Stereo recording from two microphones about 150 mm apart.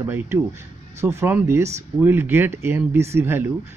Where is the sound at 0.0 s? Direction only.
15° right (ahead or behind).